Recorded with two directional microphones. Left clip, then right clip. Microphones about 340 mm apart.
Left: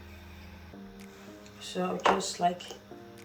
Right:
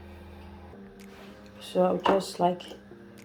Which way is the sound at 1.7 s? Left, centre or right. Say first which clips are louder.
Right 4 dB; right.